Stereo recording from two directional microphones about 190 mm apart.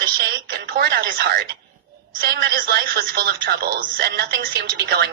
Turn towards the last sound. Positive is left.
turn(degrees=-60)  # may be behind; listen again after turning